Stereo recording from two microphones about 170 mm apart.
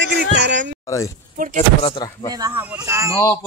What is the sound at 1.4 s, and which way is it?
Speech, 50° right (ahead or behind).